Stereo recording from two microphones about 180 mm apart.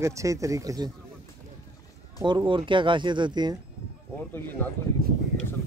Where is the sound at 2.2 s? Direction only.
25° right (ahead or behind).